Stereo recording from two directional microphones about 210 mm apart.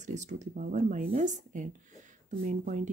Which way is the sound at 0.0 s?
35° right (ahead or behind).